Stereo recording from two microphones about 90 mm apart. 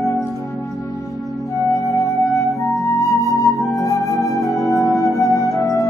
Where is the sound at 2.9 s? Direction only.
40° left (ahead or behind).